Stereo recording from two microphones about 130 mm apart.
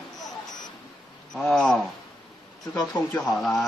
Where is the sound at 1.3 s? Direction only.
5° left (ahead or behind).